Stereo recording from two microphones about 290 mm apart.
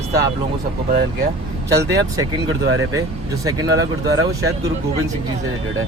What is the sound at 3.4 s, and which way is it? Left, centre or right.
Speech, centre.